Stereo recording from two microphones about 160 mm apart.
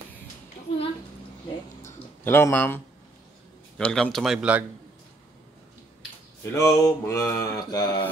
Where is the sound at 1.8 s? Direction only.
15° left (ahead or behind).